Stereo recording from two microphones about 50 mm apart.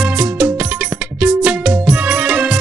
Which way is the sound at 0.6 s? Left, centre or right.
Right.